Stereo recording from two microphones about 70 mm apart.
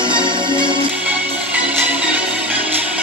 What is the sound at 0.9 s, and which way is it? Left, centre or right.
Music, centre.